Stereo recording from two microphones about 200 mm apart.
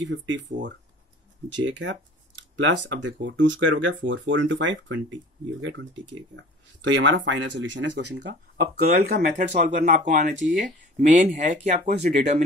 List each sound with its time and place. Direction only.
0.0 s speech: 65° right (ahead or behind); by 12.4 s 35° right (ahead or behind)